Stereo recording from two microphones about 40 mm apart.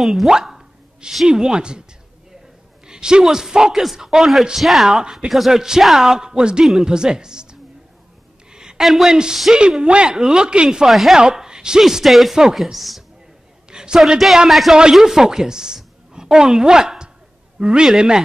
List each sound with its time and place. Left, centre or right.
0.0 s speech: centre; by 1.8 s right
2.9 s a sound: centre
3.3 s speech: centre
4.8 s speech: centre
8.5 s a sound: centre
8.8 s speech: centre
9.1 s speech: centre
10.9 s speech: centre
11.1 s speech: centre
11.8 s a man's voice: centre
13.7 s a sound: centre
13.9 s a woman's voice: centre